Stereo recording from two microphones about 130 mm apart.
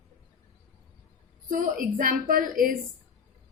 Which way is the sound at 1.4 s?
90° right.